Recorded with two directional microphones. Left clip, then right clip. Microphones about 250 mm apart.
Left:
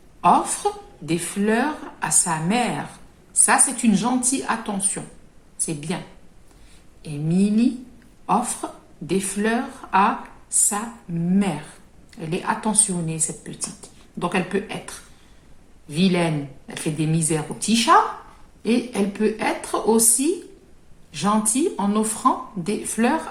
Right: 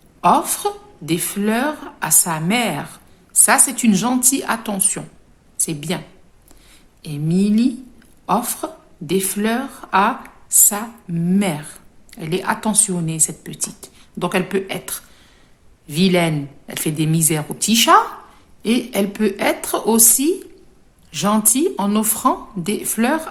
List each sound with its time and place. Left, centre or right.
0.2 s a woman's voice: right
7.0 s speech: right